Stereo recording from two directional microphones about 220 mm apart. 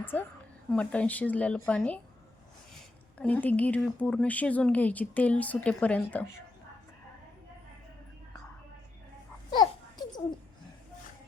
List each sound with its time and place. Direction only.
0.0 s a woman's voice: 10° left (ahead or behind)
3.2 s speech: 5° left (ahead or behind)
9.5 s babbling: 20° left (ahead or behind)